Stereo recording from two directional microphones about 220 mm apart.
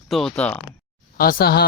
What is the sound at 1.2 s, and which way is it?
Speech, 40° left (ahead or behind).